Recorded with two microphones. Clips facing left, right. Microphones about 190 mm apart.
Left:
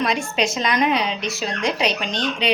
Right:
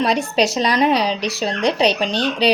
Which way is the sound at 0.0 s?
35° right (ahead or behind).